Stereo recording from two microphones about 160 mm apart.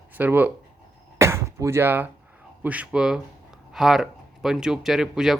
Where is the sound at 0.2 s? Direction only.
10° right (ahead or behind).